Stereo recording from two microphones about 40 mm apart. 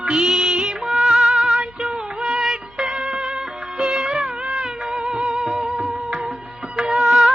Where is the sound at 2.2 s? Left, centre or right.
Centre.